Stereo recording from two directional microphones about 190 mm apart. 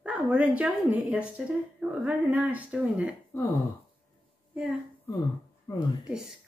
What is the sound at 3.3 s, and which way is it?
Speech, 15° left (ahead or behind).